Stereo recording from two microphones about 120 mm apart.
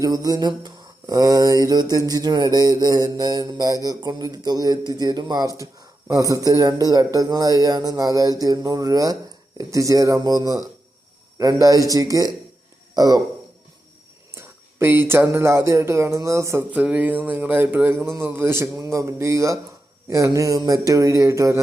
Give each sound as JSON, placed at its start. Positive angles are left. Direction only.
{"t": 0.0, "sound": "mantra", "side_deg": -30}
{"t": 9.6, "sound": "speech", "side_deg": -25}
{"t": 11.3, "sound": "mantra", "side_deg": -30}
{"t": 12.9, "sound": "a man's voice", "side_deg": -35}
{"t": 14.3, "sound": "speech", "side_deg": -20}
{"t": 16.7, "sound": "speech", "side_deg": -10}